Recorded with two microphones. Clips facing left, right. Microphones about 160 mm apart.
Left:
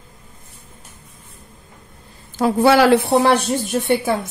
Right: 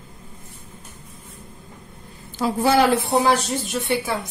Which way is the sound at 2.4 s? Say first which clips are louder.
Left 4 dB; 65° left (ahead or behind).